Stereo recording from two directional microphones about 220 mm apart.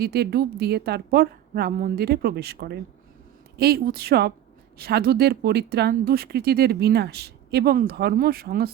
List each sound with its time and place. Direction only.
0.0 s speech: 45° right (ahead or behind)